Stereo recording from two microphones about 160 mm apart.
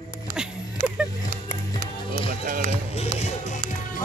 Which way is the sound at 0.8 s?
60° right (ahead or behind).